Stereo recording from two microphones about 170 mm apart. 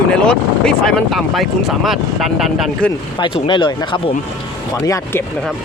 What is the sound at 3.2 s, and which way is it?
Speech, 30° left (ahead or behind).